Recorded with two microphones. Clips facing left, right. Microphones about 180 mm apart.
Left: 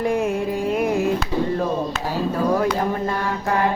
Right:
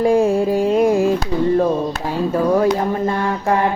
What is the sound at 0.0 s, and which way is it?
Music, 30° right (ahead or behind).